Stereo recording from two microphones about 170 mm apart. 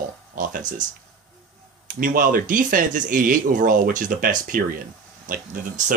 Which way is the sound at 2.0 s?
55° right (ahead or behind).